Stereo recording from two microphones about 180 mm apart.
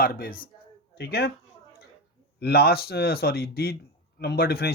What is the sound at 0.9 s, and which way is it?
Speech, 65° left (ahead or behind).